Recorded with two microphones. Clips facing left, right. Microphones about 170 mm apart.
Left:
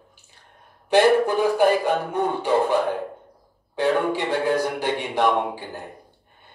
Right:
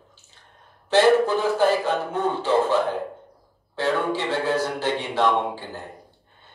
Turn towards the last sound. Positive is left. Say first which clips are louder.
# even
turn(degrees=15)  # may be behind; listen again after turning